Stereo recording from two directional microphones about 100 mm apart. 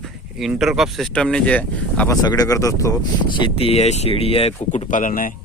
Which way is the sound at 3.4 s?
70° left (ahead or behind).